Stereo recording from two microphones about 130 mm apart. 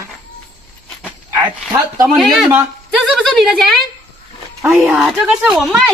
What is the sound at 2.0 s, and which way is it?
A woman's voice, centre (ahead or behind).